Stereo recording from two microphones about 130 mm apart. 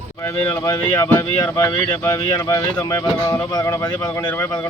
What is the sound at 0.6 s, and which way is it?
Speech, 15° left (ahead or behind).